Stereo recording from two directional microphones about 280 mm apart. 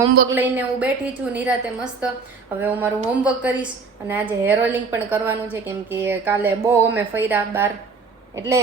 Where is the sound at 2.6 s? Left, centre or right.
Centre.